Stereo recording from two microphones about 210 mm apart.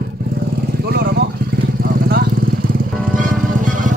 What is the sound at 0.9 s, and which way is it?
Vehicle, 50° right (ahead or behind).